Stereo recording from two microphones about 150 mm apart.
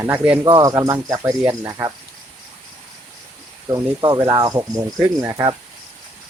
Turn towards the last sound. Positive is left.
turn(degrees=-25)  # may be behind; listen again after turning